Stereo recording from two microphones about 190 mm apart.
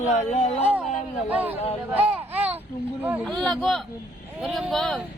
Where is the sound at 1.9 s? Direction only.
10° right (ahead or behind).